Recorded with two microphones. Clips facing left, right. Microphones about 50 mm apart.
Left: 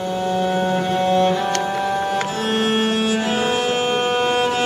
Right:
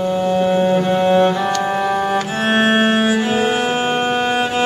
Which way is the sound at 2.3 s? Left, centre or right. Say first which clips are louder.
Right 5 dB; right.